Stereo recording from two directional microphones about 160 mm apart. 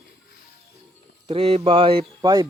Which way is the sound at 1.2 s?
40° right (ahead or behind).